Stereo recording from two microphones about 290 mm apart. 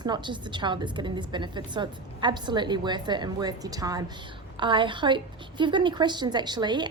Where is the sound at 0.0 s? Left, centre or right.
Centre.